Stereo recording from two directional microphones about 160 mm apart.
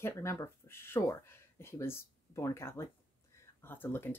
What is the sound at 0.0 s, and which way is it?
Speech, 15° left (ahead or behind).